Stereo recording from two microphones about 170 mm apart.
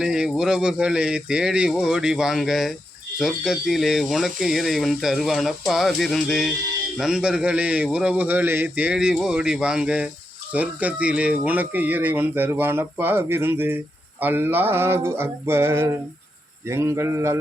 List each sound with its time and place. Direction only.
0.0 s speech: 5° right (ahead or behind)